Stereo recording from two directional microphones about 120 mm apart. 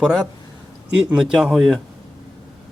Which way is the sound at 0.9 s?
10° right (ahead or behind).